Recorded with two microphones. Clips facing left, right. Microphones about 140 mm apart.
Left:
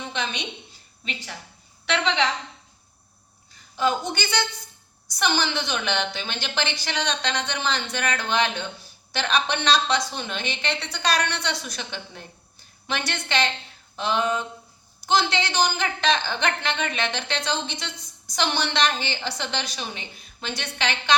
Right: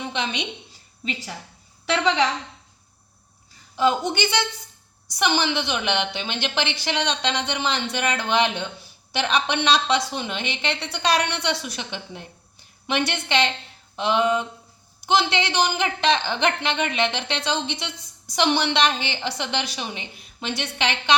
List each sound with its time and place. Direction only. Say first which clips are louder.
0.0 s a woman's voice: right 3 dB; 25° right (ahead or behind)
3.8 s a man's voice: right 3 dB; 25° right (ahead or behind)